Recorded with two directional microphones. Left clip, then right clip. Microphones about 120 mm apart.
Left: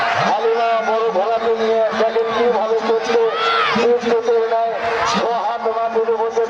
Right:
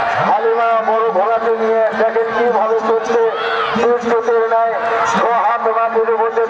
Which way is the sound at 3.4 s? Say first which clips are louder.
Left 1 dB; 45° left (ahead or behind).